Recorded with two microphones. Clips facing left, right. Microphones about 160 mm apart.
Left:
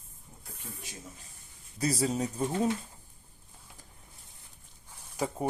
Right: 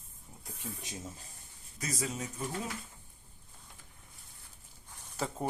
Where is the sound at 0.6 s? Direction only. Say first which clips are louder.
Right 4 dB; 10° right (ahead or behind).